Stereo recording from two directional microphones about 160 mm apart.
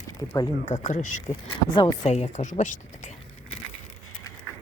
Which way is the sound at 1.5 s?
30° left (ahead or behind).